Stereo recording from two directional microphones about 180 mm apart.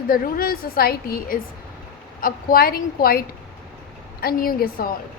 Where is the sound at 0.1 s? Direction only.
55° left (ahead or behind).